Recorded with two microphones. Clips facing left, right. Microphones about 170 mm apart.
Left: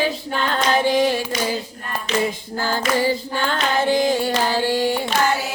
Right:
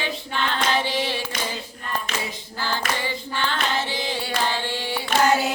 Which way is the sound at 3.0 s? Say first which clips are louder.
Left 7 dB; 40° left (ahead or behind).